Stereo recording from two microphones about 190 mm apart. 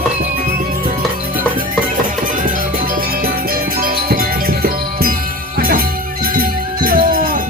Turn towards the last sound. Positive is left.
turn(degrees=-50)  # may be behind; listen again after turning